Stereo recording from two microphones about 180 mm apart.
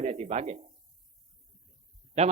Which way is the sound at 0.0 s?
40° right (ahead or behind).